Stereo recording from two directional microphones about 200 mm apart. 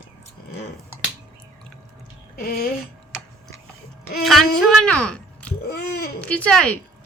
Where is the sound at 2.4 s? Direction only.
45° left (ahead or behind).